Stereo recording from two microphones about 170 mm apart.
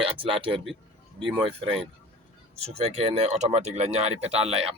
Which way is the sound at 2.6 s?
35° right (ahead or behind).